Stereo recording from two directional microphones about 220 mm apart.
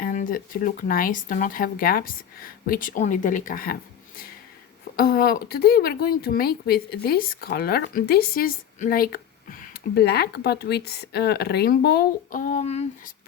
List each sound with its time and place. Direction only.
0.0 s speech: 35° left (ahead or behind)
4.9 s speech: 45° left (ahead or behind)